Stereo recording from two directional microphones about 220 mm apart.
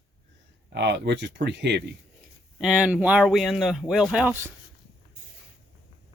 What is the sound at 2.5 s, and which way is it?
Speech, 5° right (ahead or behind).